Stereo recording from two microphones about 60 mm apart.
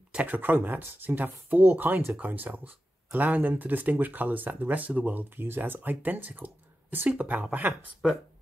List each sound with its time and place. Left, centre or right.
0.1 s speech: right